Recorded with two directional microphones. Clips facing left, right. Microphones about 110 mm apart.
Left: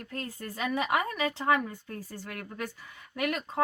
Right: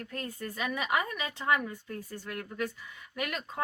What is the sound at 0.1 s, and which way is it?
A woman's voice, 30° left (ahead or behind).